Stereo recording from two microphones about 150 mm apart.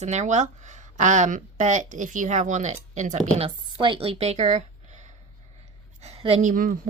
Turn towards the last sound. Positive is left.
turn(degrees=-65)  # may be behind; listen again after turning